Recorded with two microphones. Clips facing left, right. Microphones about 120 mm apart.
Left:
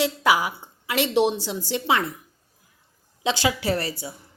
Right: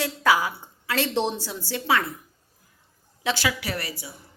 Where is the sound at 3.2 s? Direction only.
25° left (ahead or behind).